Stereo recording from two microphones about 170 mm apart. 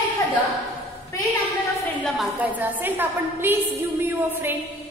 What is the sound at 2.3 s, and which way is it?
A woman's voice, 10° right (ahead or behind).